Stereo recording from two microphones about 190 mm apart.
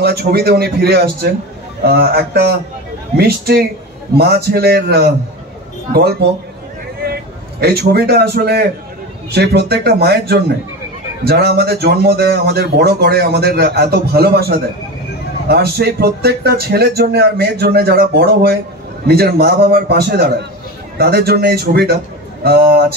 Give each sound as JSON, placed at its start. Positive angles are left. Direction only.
{"t": 0.0, "sound": "speech", "side_deg": -55}
{"t": 7.6, "sound": "a man's voice", "side_deg": -55}